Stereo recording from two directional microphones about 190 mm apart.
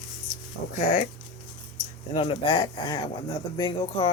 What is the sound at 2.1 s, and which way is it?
Speech, 30° left (ahead or behind).